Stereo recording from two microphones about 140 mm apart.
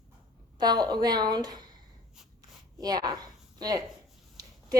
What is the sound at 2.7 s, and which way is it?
A woman's voice, 30° right (ahead or behind).